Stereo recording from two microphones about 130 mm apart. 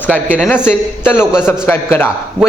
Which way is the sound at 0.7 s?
15° left (ahead or behind).